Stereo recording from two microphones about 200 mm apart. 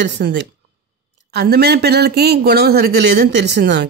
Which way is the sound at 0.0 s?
60° right (ahead or behind).